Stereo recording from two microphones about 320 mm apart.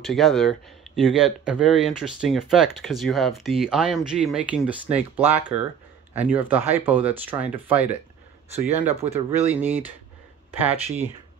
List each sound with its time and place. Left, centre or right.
0.0 s speech: centre
8.5 s speech: centre
9.5 s speech: centre